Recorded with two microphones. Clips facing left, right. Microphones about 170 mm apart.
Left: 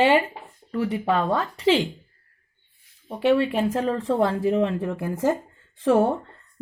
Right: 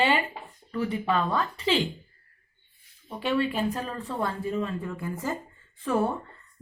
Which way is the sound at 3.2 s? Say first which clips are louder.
Left 6 dB; 75° left (ahead or behind).